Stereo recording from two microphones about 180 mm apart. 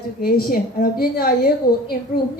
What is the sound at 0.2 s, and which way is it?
A woman's voice, 55° left (ahead or behind).